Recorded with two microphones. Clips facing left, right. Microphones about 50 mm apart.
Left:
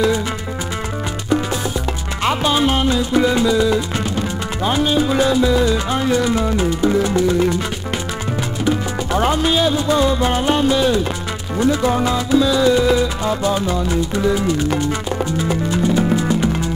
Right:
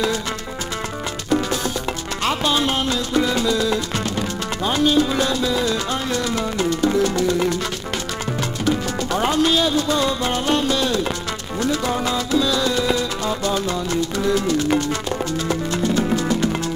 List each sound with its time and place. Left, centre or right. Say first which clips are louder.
2.2 s music: left 4 dB; centre
9.1 s music: left 2 dB; centre